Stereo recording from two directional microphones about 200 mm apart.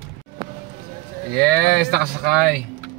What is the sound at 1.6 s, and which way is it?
Speech, 55° right (ahead or behind).